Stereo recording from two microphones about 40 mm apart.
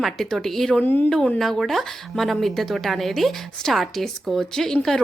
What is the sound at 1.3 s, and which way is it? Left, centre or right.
A woman's voice, centre.